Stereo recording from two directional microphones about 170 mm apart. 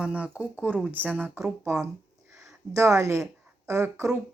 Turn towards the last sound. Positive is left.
turn(degrees=-15)  # may be behind; listen again after turning